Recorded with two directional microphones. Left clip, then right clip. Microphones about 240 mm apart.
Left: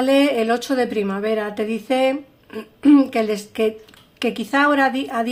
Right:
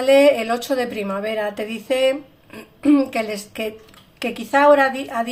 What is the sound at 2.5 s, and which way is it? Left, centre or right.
A woman's voice, left.